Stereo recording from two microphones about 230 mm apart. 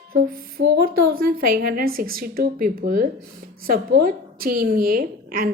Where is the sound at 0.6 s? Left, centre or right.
Right.